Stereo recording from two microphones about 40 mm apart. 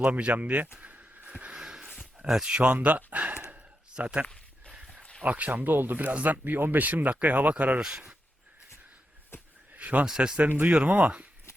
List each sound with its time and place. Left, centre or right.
0.0 s speech: right
0.3 s speech: right
0.8 s a sound: right
1.5 s a sound: centre
2.1 s speech: centre
2.6 s speech: right
5.2 s speech: right
6.4 s speech: right
7.8 s speech: centre
9.3 s a sound: left
9.7 s a sound: right
10.1 s speech: centre
10.6 s speech: right
10.8 s speech: right